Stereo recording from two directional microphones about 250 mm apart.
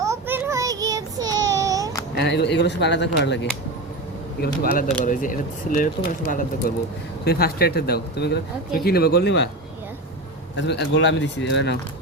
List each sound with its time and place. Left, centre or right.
0.0 s child singing: centre
2.1 s speech: left
10.6 s speech: left